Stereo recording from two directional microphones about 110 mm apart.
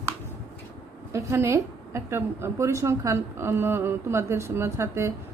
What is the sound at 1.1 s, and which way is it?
A woman's voice, 25° right (ahead or behind).